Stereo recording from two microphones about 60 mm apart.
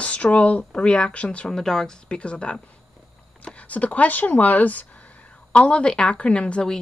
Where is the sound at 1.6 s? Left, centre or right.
Centre.